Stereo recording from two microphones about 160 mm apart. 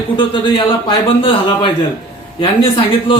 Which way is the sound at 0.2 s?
30° left (ahead or behind).